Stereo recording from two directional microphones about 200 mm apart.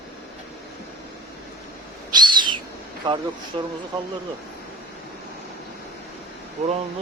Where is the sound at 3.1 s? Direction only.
25° right (ahead or behind).